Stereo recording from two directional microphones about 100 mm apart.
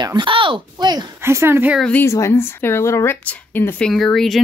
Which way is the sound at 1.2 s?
25° right (ahead or behind).